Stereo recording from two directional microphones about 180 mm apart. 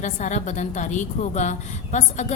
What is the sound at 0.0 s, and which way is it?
A woman's voice, 45° left (ahead or behind).